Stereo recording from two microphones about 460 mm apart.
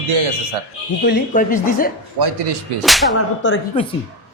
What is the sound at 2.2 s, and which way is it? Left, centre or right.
Speech, right.